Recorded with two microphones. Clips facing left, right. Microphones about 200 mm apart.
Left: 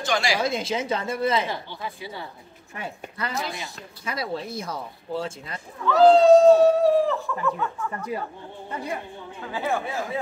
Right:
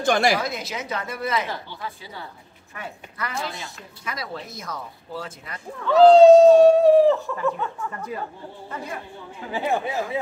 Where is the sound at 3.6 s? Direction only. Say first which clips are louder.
Left 1 dB; 25° left (ahead or behind).